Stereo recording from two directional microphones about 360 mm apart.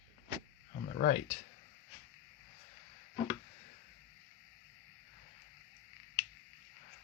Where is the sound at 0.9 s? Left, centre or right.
Left.